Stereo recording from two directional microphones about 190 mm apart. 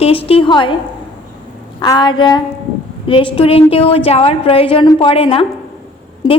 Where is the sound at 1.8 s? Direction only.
25° left (ahead or behind).